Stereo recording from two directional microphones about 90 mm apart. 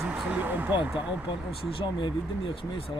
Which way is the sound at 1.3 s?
65° left (ahead or behind).